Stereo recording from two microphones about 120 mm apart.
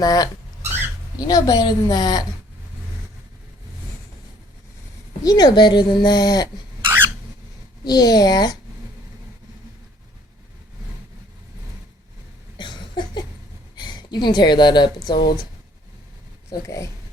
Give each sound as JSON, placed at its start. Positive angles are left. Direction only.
{"t": 0.0, "sound": "speech", "side_deg": 35}
{"t": 1.3, "sound": "speech", "side_deg": 30}
{"t": 5.2, "sound": "speech", "side_deg": 30}
{"t": 6.8, "sound": "a sound", "side_deg": -20}
{"t": 7.9, "sound": "speech", "side_deg": 35}
{"t": 12.5, "sound": "a sound", "side_deg": 40}
{"t": 13.7, "sound": "speech", "side_deg": 40}
{"t": 16.5, "sound": "speech", "side_deg": 25}